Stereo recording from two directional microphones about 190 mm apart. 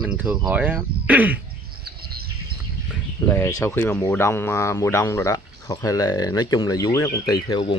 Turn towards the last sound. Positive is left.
turn(degrees=20)  # may be behind; listen again after turning